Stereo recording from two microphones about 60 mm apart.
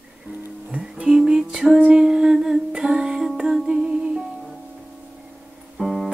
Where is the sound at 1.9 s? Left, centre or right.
Centre.